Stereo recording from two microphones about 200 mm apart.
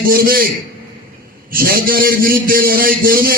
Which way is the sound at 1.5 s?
45° right (ahead or behind).